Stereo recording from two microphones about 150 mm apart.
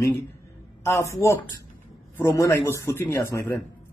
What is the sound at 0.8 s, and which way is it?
A man's voice, 20° left (ahead or behind).